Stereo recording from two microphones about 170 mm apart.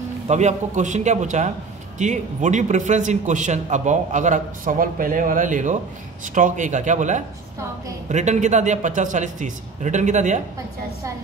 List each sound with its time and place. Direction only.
0.3 s a man's voice: 45° right (ahead or behind)